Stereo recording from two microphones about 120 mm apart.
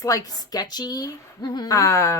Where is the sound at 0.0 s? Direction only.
30° left (ahead or behind).